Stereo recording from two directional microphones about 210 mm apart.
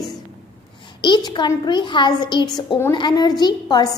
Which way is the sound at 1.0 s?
20° left (ahead or behind).